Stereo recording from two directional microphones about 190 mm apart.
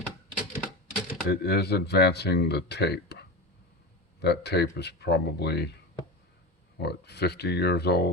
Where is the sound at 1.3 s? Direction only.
60° left (ahead or behind).